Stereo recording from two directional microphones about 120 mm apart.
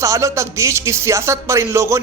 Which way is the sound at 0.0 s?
25° right (ahead or behind).